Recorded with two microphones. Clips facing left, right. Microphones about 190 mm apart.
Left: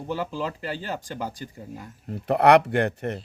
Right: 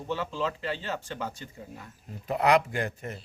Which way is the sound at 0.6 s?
40° left (ahead or behind).